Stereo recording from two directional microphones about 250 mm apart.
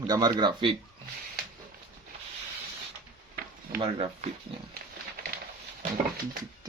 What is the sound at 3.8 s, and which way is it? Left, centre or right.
Speech, right.